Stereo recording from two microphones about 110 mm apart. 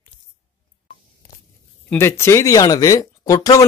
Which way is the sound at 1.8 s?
20° left (ahead or behind).